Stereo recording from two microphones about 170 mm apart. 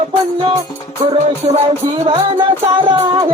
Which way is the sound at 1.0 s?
35° right (ahead or behind).